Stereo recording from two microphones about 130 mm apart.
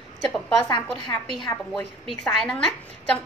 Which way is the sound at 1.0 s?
35° left (ahead or behind).